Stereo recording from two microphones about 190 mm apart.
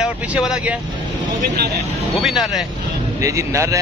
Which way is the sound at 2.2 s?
Centre (ahead or behind).